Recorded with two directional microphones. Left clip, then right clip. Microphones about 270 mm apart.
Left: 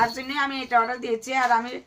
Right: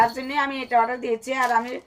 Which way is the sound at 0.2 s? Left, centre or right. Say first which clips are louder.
Right 2 dB; centre.